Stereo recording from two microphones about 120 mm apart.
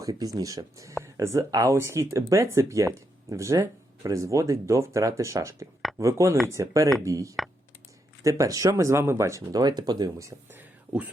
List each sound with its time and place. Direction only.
0.0 s speech: 30° right (ahead or behind)
10.6 s whispering: 15° right (ahead or behind)